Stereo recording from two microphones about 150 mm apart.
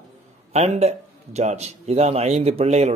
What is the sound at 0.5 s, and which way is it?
A man's voice, 45° right (ahead or behind).